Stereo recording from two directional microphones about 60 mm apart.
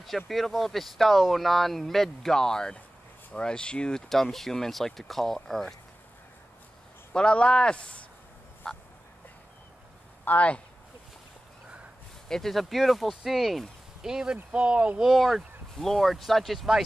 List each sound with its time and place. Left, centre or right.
0.0 s speech: centre
7.2 s speech: centre
8.6 s speech: centre
10.2 s speech: left
12.3 s speech: centre
15.0 s speech: centre